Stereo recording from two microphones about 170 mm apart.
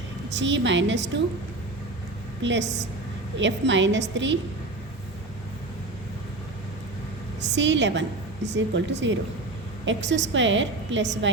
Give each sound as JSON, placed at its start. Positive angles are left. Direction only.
{"t": 0.3, "sound": "a woman's voice", "side_deg": -90}
{"t": 2.4, "sound": "a woman's voice", "side_deg": -90}
{"t": 7.5, "sound": "a woman's voice", "side_deg": -90}